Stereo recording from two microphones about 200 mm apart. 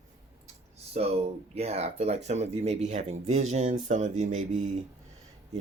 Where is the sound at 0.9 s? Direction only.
30° right (ahead or behind).